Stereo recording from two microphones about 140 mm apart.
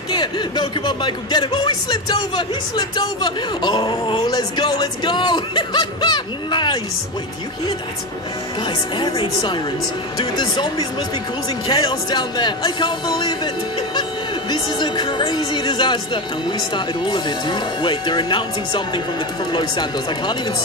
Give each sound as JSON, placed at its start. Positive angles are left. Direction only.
{"t": 0.1, "sound": "speech", "side_deg": 30}
{"t": 8.9, "sound": "speech", "side_deg": 30}
{"t": 14.5, "sound": "speech", "side_deg": 30}